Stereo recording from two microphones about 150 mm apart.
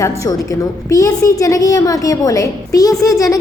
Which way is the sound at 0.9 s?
20° left (ahead or behind).